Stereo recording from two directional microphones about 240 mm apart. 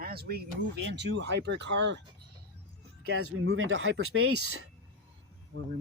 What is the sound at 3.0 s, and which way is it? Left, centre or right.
Speech, right.